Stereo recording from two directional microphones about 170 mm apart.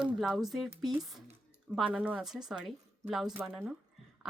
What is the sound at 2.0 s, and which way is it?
Speech, 10° right (ahead or behind).